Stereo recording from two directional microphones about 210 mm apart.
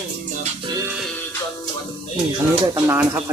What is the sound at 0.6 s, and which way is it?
Speech, 20° right (ahead or behind).